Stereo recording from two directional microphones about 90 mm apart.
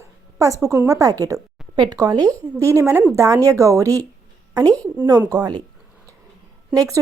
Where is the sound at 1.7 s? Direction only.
60° right (ahead or behind).